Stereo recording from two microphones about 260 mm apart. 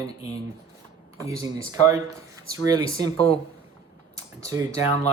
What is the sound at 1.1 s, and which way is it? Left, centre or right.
Speech, centre.